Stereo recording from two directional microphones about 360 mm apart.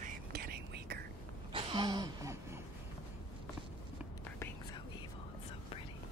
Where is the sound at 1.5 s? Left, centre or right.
Centre.